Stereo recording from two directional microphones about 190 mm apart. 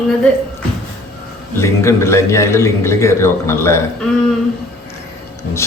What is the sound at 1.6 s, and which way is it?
A man's voice, 15° left (ahead or behind).